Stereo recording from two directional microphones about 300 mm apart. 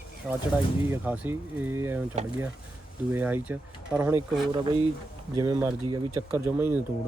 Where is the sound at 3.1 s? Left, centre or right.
Centre.